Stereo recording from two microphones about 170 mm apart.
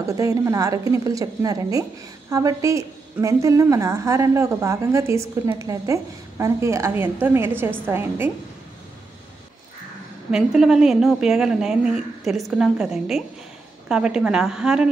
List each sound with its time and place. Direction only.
0.0 s a woman's voice: 20° right (ahead or behind)
10.3 s a woman's voice: centre (ahead or behind)